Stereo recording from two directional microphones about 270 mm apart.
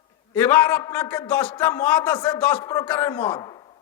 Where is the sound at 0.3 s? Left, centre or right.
Centre.